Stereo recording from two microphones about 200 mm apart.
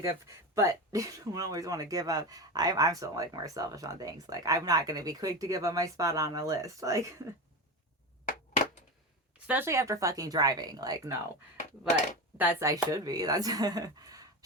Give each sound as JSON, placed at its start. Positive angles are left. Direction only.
{"t": 0.0, "sound": "speech", "side_deg": -15}
{"t": 9.5, "sound": "speech", "side_deg": -10}
{"t": 12.4, "sound": "speech", "side_deg": -10}